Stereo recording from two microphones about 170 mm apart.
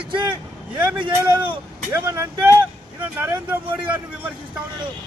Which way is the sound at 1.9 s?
15° right (ahead or behind).